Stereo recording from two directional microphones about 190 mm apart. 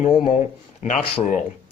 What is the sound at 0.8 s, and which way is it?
Speech, 40° left (ahead or behind).